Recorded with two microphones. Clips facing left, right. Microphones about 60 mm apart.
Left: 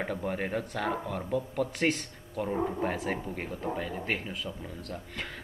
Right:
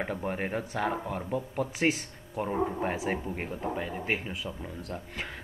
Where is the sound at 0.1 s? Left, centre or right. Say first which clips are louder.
Even; centre.